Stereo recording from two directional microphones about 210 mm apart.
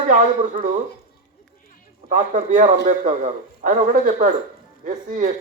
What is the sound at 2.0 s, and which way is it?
A man's voice, 35° right (ahead or behind).